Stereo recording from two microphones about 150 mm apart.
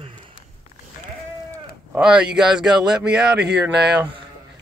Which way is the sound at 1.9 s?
5° right (ahead or behind).